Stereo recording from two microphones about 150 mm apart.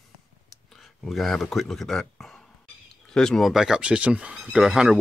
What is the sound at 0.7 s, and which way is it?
Speech, centre (ahead or behind).